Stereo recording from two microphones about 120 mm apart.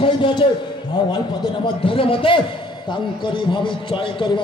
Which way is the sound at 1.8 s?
45° left (ahead or behind).